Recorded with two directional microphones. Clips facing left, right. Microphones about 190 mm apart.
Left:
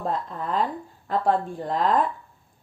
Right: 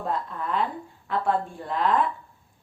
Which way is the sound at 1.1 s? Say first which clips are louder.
Left 2 dB; 40° left (ahead or behind).